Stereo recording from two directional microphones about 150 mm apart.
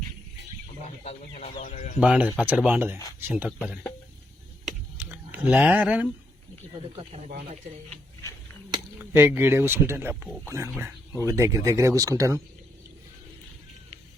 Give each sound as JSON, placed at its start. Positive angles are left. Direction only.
{"t": 1.0, "sound": "speech", "side_deg": 45}
{"t": 2.0, "sound": "speech", "side_deg": -10}
{"t": 4.6, "sound": "computer keyboard", "side_deg": -10}
{"t": 6.9, "sound": "speech", "side_deg": -40}
{"t": 9.1, "sound": "speech", "side_deg": -15}